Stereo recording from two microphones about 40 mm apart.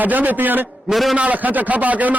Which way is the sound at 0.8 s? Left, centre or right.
Centre.